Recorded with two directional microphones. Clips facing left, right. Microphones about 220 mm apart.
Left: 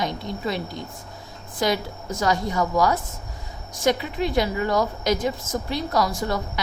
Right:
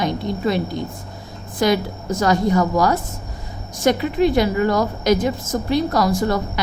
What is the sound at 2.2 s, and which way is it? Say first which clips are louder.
A woman's voice: right 6 dB; 50° right (ahead or behind).